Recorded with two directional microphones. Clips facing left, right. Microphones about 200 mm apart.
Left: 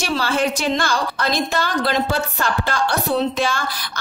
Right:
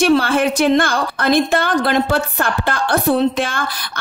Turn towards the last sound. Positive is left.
turn(degrees=-55)  # may be behind; listen again after turning